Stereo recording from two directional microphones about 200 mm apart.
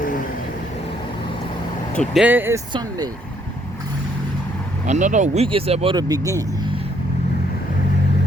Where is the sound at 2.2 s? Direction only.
10° right (ahead or behind).